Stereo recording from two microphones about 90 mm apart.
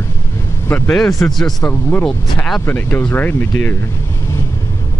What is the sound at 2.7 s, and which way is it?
Speech, 25° left (ahead or behind).